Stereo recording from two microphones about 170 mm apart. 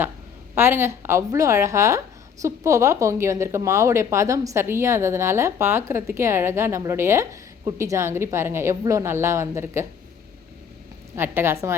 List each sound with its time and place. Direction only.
0.5 s a woman's voice: 15° right (ahead or behind)
11.2 s a woman's voice: 15° right (ahead or behind)